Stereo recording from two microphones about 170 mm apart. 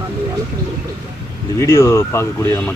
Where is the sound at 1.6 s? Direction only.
15° left (ahead or behind).